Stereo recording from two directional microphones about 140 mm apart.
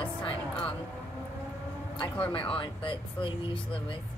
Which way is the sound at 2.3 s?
40° left (ahead or behind).